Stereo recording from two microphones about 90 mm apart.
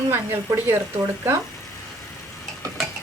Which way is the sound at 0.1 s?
30° right (ahead or behind).